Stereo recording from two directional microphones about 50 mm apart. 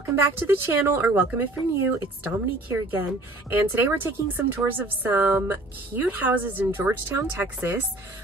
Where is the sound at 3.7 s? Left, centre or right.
Right.